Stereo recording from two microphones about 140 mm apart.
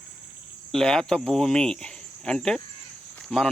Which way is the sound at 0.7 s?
5° left (ahead or behind).